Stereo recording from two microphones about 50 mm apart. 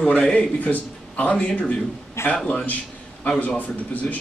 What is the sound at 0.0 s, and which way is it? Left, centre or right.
A man's voice, left.